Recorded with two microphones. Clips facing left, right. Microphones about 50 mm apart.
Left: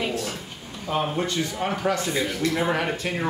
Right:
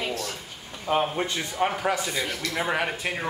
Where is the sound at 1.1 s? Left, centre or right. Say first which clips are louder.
Left 3 dB; centre.